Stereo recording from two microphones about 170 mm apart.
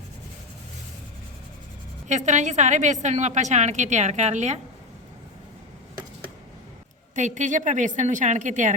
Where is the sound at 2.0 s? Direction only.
45° right (ahead or behind).